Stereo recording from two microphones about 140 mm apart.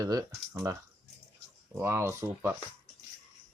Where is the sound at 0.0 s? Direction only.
25° right (ahead or behind).